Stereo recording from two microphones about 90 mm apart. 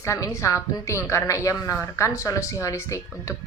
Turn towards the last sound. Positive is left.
turn(degrees=35)  # may be behind; listen again after turning